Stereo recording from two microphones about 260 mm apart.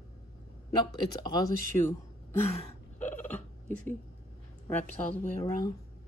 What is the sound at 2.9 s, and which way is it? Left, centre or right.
Burping, centre.